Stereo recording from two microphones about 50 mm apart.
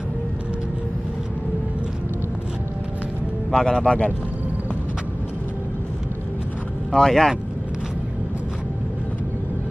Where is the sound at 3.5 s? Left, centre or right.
Centre.